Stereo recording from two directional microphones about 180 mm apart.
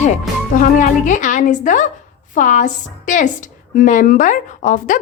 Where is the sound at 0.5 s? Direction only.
45° left (ahead or behind).